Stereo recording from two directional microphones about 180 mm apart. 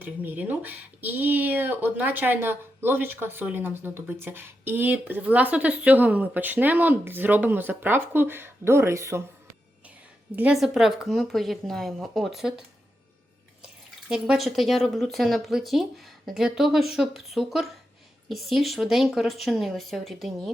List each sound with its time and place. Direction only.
0.0 s speech: 10° right (ahead or behind)
10.3 s speech: 5° right (ahead or behind)
14.1 s speech: centre (ahead or behind)